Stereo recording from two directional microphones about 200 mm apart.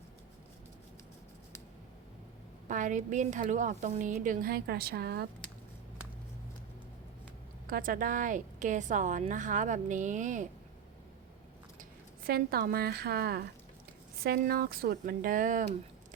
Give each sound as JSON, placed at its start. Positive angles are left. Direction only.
{"t": 2.6, "sound": "a woman's voice", "side_deg": -40}
{"t": 7.7, "sound": "a woman's voice", "side_deg": -45}
{"t": 11.8, "sound": "speech", "side_deg": -50}